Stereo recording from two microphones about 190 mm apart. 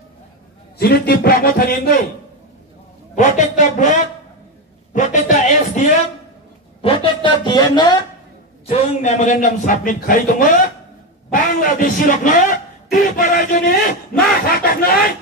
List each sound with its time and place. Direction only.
0.7 s a man's voice: 55° left (ahead or behind)
3.2 s a man's voice: 40° left (ahead or behind)
4.9 s a sound: 40° left (ahead or behind); by 8.0 s 20° left (ahead or behind)
8.6 s a man's voice: 35° left (ahead or behind)
11.6 s speech: 45° left (ahead or behind)